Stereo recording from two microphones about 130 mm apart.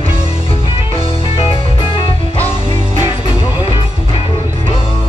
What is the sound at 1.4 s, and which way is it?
Music, 45° left (ahead or behind).